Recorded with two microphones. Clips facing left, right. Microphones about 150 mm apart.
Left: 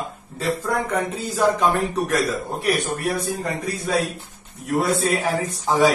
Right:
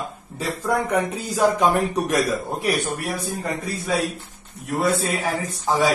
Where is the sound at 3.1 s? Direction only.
Centre (ahead or behind).